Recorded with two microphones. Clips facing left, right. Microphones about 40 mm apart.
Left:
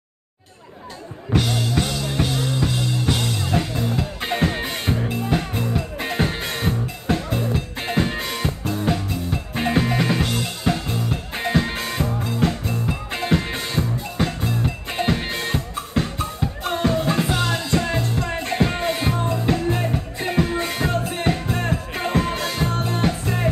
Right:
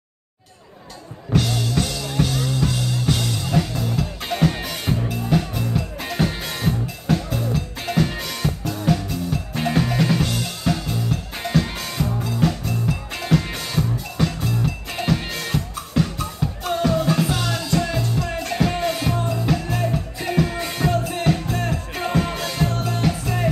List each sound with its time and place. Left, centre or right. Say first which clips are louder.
1.3 s music: even; centre